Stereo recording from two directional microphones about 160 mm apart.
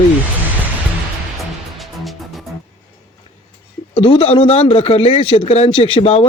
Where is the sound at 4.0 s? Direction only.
35° left (ahead or behind).